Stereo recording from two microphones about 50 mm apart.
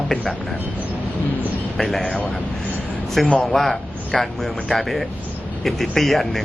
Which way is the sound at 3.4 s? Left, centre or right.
Centre.